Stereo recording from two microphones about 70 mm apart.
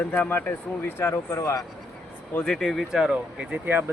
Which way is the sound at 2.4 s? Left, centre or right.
Centre.